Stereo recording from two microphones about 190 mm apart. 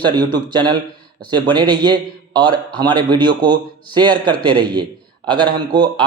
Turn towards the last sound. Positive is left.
turn(degrees=-25)  # may be behind; listen again after turning